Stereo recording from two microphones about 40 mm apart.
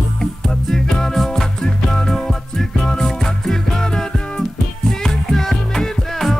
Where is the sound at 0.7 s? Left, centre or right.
Centre.